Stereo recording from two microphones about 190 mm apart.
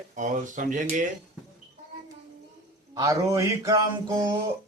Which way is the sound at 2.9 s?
15° right (ahead or behind).